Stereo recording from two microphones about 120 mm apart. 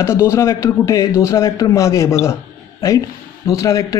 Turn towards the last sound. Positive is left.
turn(degrees=25)  # may be behind; listen again after turning